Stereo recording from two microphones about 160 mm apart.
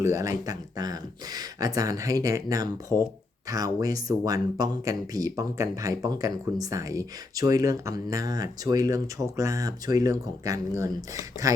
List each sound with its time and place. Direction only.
0.0 s speech: 20° right (ahead or behind)